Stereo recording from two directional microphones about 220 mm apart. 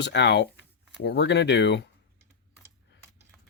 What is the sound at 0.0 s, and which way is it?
Speech, 50° left (ahead or behind).